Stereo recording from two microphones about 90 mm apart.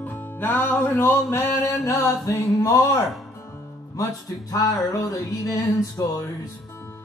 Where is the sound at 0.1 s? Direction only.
25° left (ahead or behind); by 6.2 s 45° left (ahead or behind).